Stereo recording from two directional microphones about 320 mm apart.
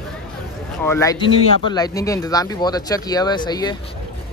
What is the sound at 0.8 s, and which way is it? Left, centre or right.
Speech, centre.